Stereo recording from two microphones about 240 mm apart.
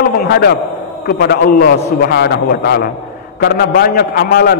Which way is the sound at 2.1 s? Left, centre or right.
Left.